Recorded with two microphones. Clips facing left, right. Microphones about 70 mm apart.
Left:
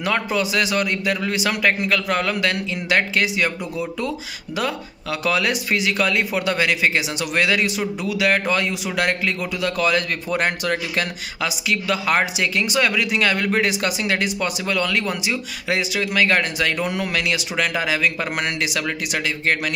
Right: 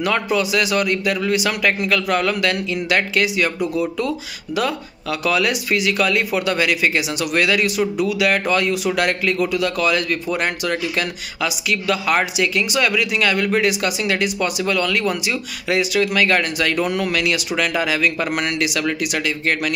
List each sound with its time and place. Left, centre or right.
0.0 s a man's voice: left
5.2 s a man's voice: left